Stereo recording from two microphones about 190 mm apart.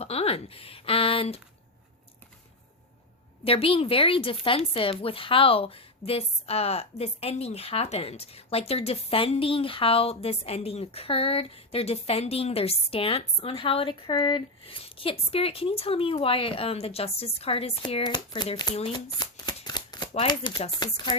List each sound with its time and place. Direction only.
0.0 s speech: 30° left (ahead or behind)
3.4 s speech: 30° left (ahead or behind)